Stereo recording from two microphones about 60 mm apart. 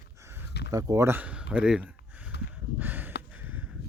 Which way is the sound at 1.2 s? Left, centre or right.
Right.